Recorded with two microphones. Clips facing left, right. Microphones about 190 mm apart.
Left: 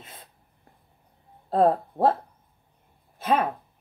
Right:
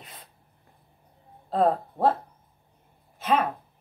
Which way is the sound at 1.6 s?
30° left (ahead or behind).